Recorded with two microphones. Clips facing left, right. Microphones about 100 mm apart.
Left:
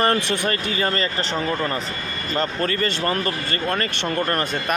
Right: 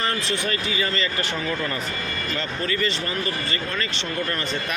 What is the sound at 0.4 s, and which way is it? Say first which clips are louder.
Speech: left 3 dB; 45° left (ahead or behind).